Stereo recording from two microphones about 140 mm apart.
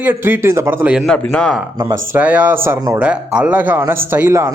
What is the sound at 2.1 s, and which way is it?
Speech, 10° right (ahead or behind).